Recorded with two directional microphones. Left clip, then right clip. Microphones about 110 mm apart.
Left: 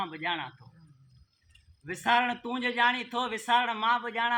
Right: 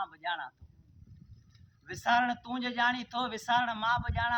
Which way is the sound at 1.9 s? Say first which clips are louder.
Left 2 dB; 30° right (ahead or behind).